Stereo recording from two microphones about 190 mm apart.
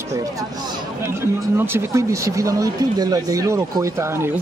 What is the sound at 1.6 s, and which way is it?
Speech, 10° right (ahead or behind).